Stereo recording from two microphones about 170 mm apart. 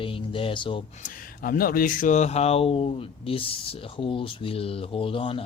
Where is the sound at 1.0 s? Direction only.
55° left (ahead or behind).